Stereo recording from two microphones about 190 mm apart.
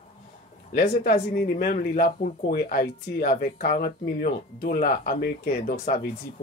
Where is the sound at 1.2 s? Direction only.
50° left (ahead or behind).